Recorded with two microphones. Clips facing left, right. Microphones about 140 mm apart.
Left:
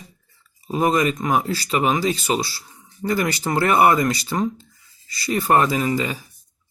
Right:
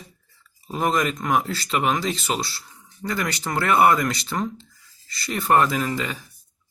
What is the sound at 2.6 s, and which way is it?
Speech, 15° left (ahead or behind).